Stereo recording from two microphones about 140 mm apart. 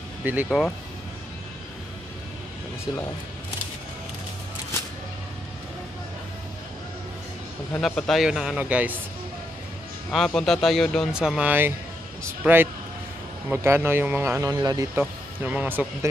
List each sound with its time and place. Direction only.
0.2 s speech: 10° right (ahead or behind)
0.5 s a man's voice: centre (ahead or behind)
7.8 s a man's voice: centre (ahead or behind)
10.1 s a man's voice: centre (ahead or behind)
11.1 s speech: 5° right (ahead or behind); by 14.9 s 30° right (ahead or behind)
15.0 s speech: 10° right (ahead or behind)